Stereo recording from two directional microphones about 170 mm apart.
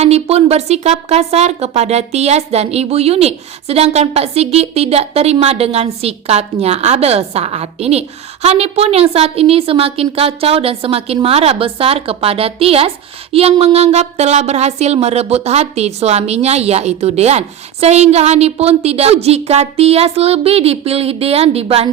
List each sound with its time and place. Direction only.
0.0 s speech: 35° right (ahead or behind)